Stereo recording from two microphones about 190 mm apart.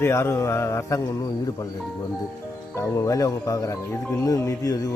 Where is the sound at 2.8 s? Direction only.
15° left (ahead or behind).